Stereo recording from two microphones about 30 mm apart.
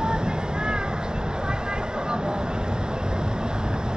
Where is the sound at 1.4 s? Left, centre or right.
Right.